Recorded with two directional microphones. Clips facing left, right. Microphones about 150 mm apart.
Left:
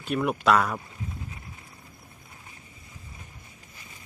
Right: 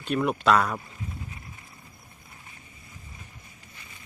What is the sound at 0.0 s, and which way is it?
Speech, 5° left (ahead or behind).